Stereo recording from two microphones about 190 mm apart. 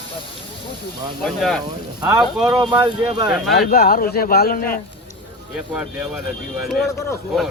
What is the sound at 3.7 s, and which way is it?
A man's voice, 50° left (ahead or behind).